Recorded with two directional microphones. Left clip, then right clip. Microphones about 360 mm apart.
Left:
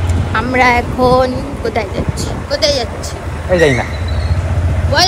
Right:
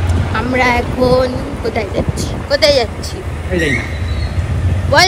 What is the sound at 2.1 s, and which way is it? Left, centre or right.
Speech, centre.